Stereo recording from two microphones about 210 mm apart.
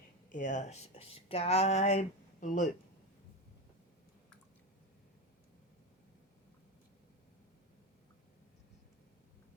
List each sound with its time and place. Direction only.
0.3 s speech: 40° left (ahead or behind)